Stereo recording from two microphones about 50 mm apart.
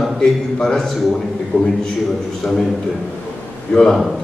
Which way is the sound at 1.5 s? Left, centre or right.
Left.